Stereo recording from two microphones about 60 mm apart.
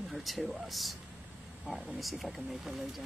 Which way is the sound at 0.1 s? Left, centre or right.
Centre.